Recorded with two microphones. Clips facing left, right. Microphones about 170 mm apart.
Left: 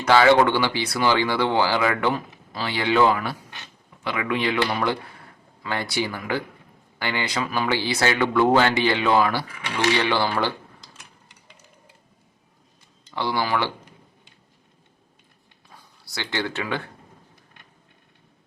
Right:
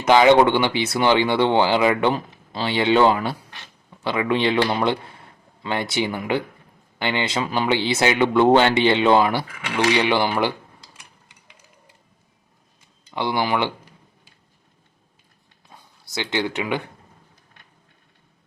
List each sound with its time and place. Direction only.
0.0 s speech: 20° right (ahead or behind)
13.1 s speech: 20° right (ahead or behind)
15.7 s speech: 20° right (ahead or behind)